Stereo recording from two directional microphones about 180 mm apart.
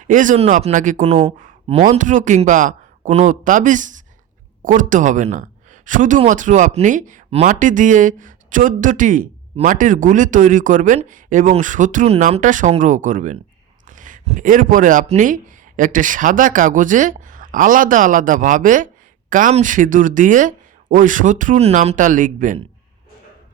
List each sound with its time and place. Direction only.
0.1 s speech: 45° right (ahead or behind)
1.0 s speech: 30° right (ahead or behind)
1.8 s speech: 45° right (ahead or behind)